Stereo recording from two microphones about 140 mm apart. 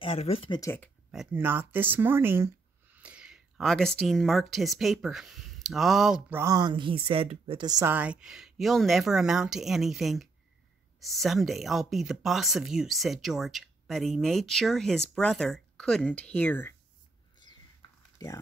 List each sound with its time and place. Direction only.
0.0 s speech: 45° left (ahead or behind)
0.6 s speech: 15° left (ahead or behind)
1.1 s speech: 5° right (ahead or behind)
1.4 s speech: 15° right (ahead or behind)
6.3 s speech: 25° right (ahead or behind); by 7.6 s 40° right (ahead or behind)
7.6 s a woman's voice: 25° right (ahead or behind)
7.9 s speech: 10° right (ahead or behind); by 16.7 s 10° left (ahead or behind)
18.2 s speech: 30° left (ahead or behind)